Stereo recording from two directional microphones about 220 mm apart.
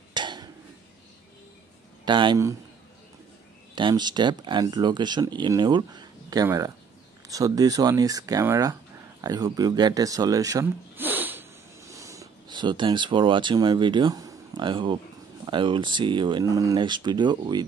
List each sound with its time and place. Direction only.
0.1 s a sound: 20° right (ahead or behind)
2.0 s speech: 20° right (ahead or behind)
3.7 s speech: 20° right (ahead or behind)